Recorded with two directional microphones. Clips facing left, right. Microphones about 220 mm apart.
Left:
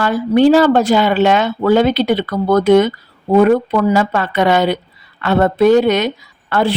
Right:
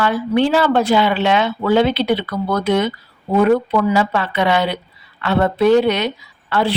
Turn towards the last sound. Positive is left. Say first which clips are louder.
# left 3 dB
turn(degrees=50)  # may be behind; listen again after turning